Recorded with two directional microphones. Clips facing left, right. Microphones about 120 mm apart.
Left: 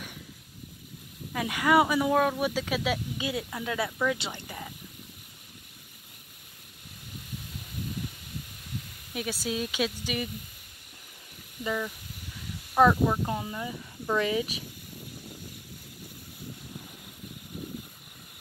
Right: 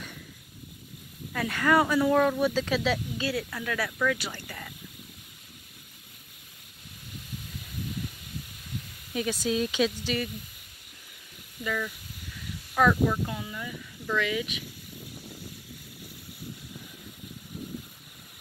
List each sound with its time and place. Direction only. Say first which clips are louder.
1.3 s speech: left 1 dB; 10° left (ahead or behind)
9.1 s speech: right 4 dB; 5° left (ahead or behind)
11.6 s speech: left 1 dB; 20° left (ahead or behind)